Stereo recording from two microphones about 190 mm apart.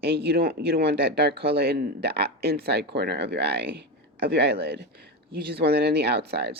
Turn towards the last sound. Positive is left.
turn(degrees=-60)  # may be behind; listen again after turning